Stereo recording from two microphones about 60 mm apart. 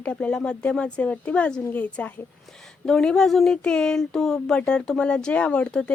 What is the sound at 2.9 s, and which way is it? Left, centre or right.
Speech, centre.